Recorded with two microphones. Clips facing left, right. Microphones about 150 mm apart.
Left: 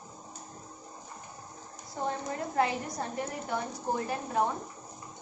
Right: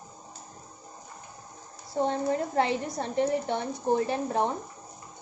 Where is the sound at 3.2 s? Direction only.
25° right (ahead or behind).